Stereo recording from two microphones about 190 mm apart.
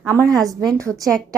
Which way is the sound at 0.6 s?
5° left (ahead or behind).